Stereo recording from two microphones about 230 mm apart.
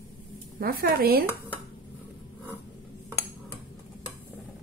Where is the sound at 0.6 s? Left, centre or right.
Right.